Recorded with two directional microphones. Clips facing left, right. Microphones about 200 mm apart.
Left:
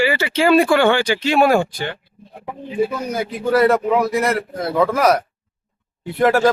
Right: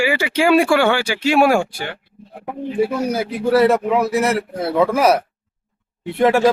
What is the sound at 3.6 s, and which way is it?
A man's voice, centre (ahead or behind).